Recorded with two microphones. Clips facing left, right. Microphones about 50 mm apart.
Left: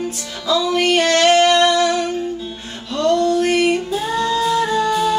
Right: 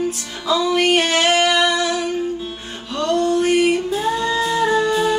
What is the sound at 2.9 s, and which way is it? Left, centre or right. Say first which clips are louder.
Music: left 2 dB; centre.